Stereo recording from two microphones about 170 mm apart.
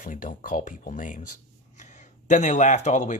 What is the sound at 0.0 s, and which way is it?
Speech, 50° left (ahead or behind).